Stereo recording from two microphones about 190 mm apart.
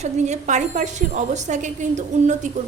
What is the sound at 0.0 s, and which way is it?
A woman's voice, 40° right (ahead or behind).